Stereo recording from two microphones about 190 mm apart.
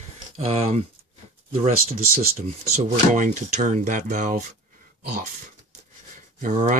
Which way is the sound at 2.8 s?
40° right (ahead or behind).